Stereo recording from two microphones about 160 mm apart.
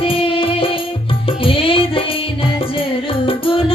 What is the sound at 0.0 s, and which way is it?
Music, 35° left (ahead or behind).